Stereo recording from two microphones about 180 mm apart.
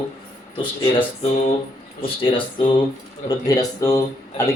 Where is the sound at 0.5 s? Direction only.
30° left (ahead or behind).